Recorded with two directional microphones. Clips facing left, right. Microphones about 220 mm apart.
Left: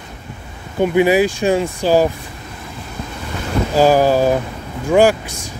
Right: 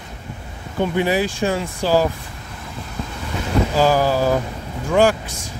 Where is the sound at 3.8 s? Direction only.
15° left (ahead or behind).